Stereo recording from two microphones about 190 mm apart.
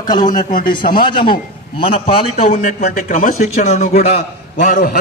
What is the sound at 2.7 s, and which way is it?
A man's voice, 50° left (ahead or behind).